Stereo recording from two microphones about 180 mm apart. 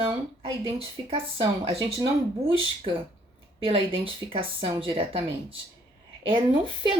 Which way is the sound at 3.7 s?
30° right (ahead or behind).